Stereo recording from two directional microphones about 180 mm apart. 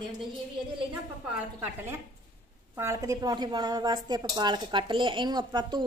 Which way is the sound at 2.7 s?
15° right (ahead or behind).